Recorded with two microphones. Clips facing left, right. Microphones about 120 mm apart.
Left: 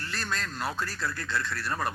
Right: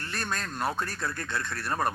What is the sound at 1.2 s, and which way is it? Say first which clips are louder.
Speech: left 1 dB; 20° right (ahead or behind).